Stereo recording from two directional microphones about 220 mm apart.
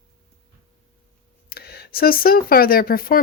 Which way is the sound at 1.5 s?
45° left (ahead or behind).